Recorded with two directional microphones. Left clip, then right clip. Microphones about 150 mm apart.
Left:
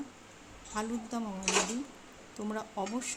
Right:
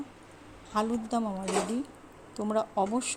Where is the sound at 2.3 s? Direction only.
20° right (ahead or behind).